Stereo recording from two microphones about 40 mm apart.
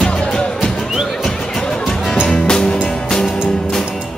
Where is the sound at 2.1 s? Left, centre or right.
Centre.